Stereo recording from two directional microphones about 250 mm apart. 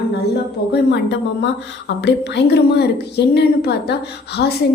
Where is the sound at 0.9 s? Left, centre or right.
Left.